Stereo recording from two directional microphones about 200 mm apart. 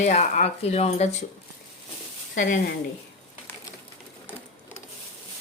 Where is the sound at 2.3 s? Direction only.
40° left (ahead or behind).